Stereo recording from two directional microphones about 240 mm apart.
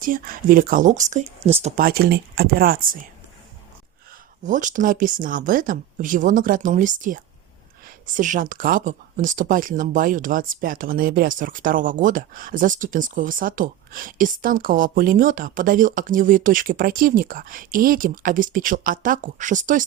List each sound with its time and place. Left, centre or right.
0.0 s speech: right
4.4 s speech: right